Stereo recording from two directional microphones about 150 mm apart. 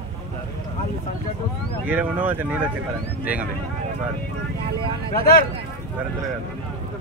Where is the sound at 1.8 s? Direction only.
10° right (ahead or behind).